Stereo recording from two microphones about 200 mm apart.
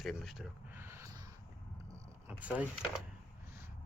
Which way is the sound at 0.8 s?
10° right (ahead or behind).